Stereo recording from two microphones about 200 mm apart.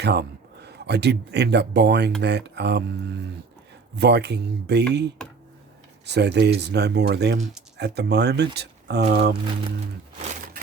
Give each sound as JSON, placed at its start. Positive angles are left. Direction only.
{"t": 0.0, "sound": "speech", "side_deg": -55}
{"t": 3.9, "sound": "speech", "side_deg": -55}
{"t": 6.1, "sound": "speech", "side_deg": -55}